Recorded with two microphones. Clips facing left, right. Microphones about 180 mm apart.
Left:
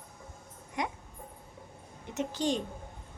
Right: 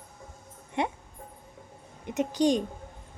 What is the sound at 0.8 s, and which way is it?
Speech, 25° right (ahead or behind).